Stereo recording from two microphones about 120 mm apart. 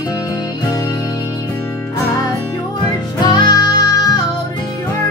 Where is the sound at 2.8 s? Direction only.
35° left (ahead or behind).